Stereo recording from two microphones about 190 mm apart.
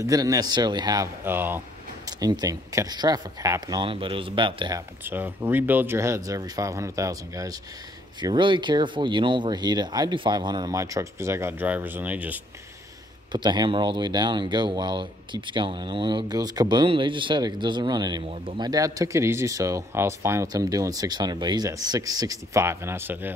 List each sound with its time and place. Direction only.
0.0 s speech: 20° right (ahead or behind)
5.0 s speech: 10° right (ahead or behind)
13.3 s speech: 25° right (ahead or behind)